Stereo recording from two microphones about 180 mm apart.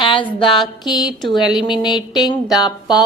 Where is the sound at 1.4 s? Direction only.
Centre (ahead or behind).